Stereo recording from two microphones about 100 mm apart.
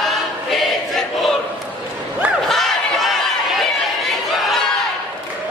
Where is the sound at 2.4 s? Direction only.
Centre (ahead or behind).